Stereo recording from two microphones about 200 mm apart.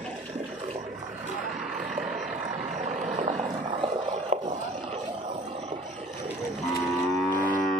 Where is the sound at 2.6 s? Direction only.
35° right (ahead or behind).